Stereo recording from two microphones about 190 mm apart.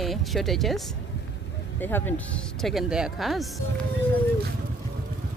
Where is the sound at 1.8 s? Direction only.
10° left (ahead or behind).